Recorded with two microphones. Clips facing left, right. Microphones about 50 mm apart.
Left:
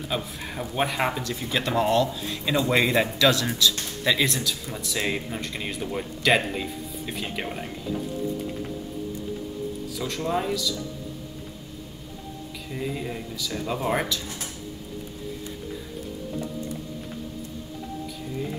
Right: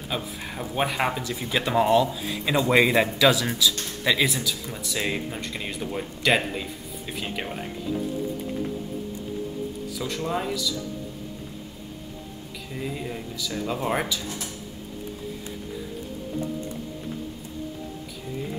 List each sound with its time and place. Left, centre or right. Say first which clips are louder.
0.1 s speech: right 1 dB; centre
9.9 s speech: left 1 dB; centre
12.7 s speech: left 1 dB; centre
16.3 s music: right 3 dB; right